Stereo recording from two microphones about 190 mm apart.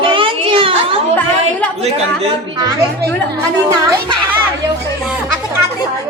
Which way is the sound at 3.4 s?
20° right (ahead or behind).